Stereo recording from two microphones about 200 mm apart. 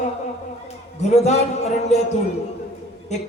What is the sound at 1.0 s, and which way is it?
Speech, 35° left (ahead or behind).